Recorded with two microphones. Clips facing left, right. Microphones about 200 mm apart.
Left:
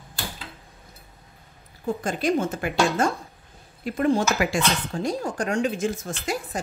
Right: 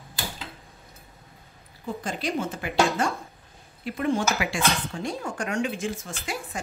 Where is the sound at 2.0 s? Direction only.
45° left (ahead or behind).